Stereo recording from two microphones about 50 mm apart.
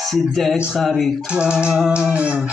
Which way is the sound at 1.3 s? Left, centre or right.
Centre.